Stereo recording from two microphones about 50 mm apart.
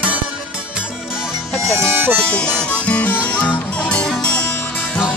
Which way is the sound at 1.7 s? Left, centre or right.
Right.